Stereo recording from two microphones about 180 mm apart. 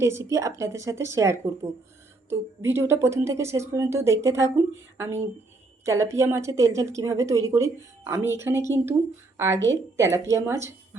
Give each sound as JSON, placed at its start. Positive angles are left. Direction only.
{"t": 0.0, "sound": "speech", "side_deg": -15}